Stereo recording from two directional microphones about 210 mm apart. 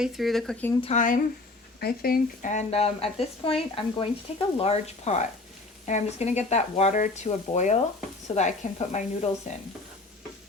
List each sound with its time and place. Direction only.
0.0 s speech: centre (ahead or behind)
0.8 s speech: 35° left (ahead or behind)